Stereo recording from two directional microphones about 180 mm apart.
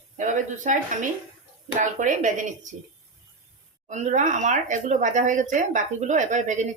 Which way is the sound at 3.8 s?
40° right (ahead or behind).